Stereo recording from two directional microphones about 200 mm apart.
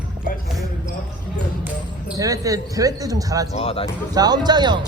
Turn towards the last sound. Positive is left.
turn(degrees=-20)  # may be behind; listen again after turning